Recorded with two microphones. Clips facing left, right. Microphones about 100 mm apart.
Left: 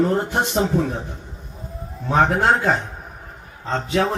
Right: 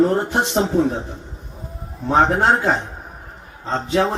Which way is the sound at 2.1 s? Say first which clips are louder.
Right 1 dB; 25° right (ahead or behind).